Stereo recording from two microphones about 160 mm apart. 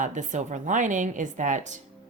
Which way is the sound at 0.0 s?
50° right (ahead or behind).